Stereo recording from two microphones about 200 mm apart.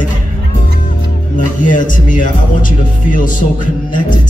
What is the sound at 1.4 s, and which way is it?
Speech, 40° left (ahead or behind).